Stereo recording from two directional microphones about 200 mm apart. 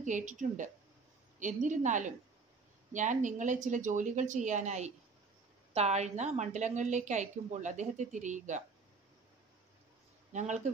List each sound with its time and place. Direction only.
0.0 s a woman's voice: 40° right (ahead or behind)
10.3 s a woman's voice: 35° right (ahead or behind)